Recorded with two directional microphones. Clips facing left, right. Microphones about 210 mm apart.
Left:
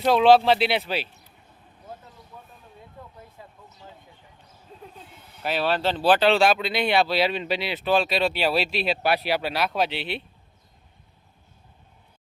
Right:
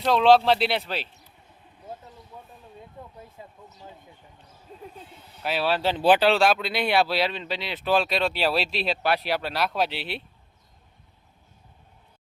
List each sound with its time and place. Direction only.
0.0 s speech: 5° left (ahead or behind)
3.4 s a sound: 20° right (ahead or behind)
5.4 s speech: centre (ahead or behind)
6.2 s speech: centre (ahead or behind)